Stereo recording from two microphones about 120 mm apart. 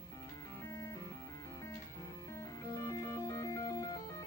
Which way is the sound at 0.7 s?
25° left (ahead or behind).